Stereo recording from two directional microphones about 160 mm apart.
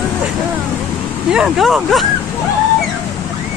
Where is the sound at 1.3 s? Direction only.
5° right (ahead or behind).